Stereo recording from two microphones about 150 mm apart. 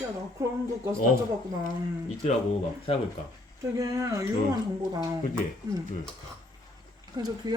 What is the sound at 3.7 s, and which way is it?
Speech, 20° right (ahead or behind).